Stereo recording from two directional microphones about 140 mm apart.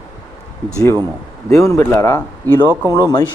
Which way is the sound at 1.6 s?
20° left (ahead or behind).